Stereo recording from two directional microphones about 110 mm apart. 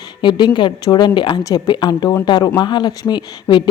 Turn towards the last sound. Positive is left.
turn(degrees=45)  # may be behind; listen again after turning